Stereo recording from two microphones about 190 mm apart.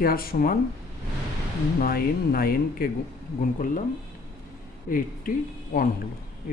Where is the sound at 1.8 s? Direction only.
50° left (ahead or behind).